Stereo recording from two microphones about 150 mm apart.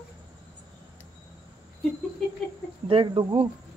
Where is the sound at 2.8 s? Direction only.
35° right (ahead or behind).